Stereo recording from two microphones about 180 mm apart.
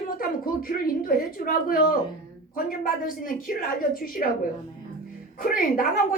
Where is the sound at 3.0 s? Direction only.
50° left (ahead or behind).